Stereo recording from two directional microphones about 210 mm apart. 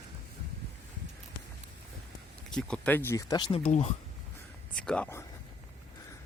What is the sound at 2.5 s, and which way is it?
Speech, 5° left (ahead or behind).